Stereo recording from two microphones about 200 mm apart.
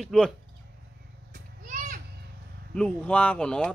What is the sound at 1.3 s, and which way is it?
Children playing, 40° right (ahead or behind).